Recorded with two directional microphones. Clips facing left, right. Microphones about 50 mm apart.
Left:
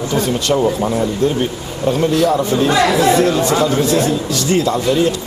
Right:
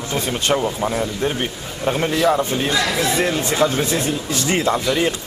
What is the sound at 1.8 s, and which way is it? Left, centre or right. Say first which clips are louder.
A man's voice: left 3 dB; right.